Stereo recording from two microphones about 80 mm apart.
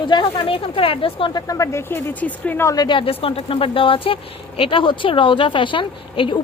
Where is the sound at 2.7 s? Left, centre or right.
Left.